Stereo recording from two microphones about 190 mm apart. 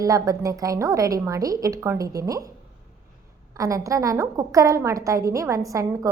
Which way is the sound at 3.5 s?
15° right (ahead or behind).